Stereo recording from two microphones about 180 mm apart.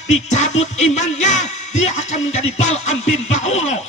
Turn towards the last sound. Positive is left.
turn(degrees=40)  # may be behind; listen again after turning